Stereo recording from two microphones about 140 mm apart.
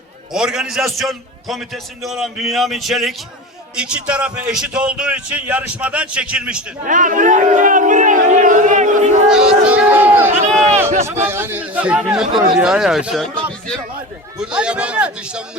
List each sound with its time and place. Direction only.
0.3 s a man's voice: 5° right (ahead or behind)
6.8 s crowd: 65° right (ahead or behind)
9.3 s a sound: 5° right (ahead or behind)
11.0 s a man's voice: 20° right (ahead or behind)